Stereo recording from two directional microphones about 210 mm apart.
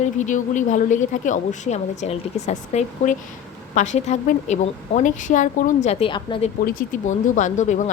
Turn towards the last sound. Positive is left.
turn(degrees=35)  # may be behind; listen again after turning